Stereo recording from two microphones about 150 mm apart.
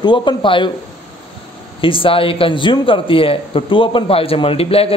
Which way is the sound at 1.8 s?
35° left (ahead or behind).